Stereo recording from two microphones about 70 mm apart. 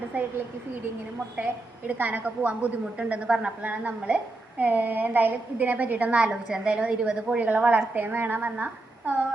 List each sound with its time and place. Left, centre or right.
0.1 s a woman's voice: right
1.9 s a woman's voice: right
3.6 s a woman's voice: right